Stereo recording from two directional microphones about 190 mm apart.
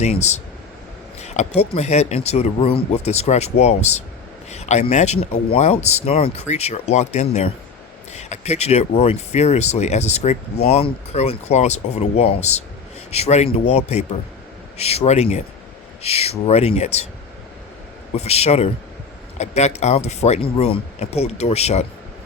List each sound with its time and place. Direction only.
0.0 s speech: 35° left (ahead or behind)
18.1 s speech: 35° left (ahead or behind)